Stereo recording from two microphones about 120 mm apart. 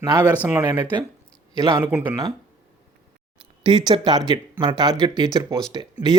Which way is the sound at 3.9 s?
35° right (ahead or behind).